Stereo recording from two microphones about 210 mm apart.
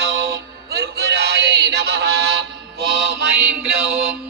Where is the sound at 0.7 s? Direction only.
50° right (ahead or behind).